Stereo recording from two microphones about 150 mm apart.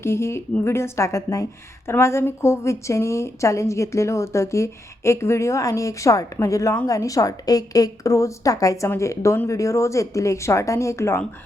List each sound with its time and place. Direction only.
0.0 s a woman's voice: 15° left (ahead or behind)